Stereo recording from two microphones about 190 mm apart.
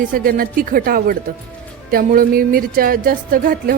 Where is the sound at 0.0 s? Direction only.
45° right (ahead or behind).